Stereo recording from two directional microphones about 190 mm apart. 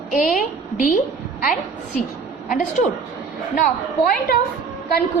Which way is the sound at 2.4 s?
45° left (ahead or behind).